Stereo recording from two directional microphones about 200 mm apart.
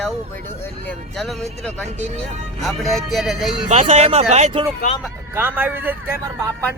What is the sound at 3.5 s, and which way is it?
Speech, 35° right (ahead or behind).